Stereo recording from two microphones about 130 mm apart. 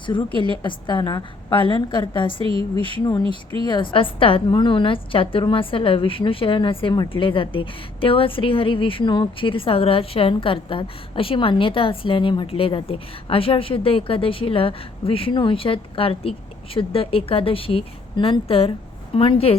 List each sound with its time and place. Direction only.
0.3 s a woman's voice: 40° right (ahead or behind)
0.6 s a woman's voice: 35° left (ahead or behind)
2.4 s a woman's voice: 45° right (ahead or behind)
3.0 s a woman's voice: 35° left (ahead or behind)